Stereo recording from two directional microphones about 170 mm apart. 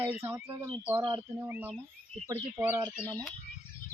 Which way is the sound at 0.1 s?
10° right (ahead or behind).